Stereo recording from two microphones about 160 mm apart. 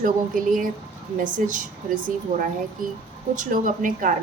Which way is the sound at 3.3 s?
55° right (ahead or behind).